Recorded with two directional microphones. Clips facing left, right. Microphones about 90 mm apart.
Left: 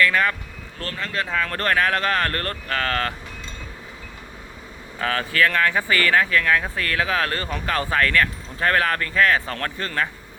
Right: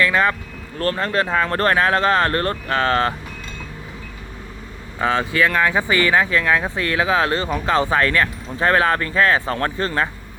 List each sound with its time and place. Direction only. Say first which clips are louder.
0.0 s speech: right 2 dB; 25° right (ahead or behind)
0.8 s speech: right 8 dB; 40° right (ahead or behind)
4.9 s speech: right 3 dB; 20° right (ahead or behind)